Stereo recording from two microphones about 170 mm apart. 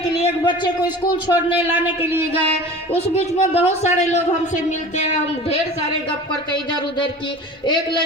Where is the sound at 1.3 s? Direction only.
10° right (ahead or behind).